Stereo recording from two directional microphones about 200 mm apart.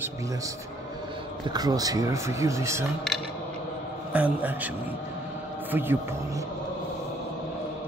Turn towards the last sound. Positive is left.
turn(degrees=-10)  # may be behind; listen again after turning